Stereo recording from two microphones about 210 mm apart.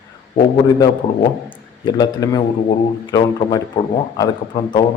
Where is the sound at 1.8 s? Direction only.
20° left (ahead or behind).